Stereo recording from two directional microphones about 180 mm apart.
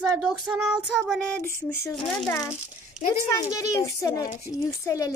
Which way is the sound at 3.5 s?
20° left (ahead or behind).